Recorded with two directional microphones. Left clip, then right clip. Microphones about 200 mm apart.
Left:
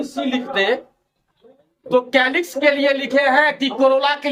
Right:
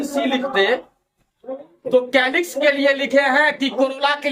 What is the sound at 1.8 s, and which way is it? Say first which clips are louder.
A woman's voice: even; 15° left (ahead or behind).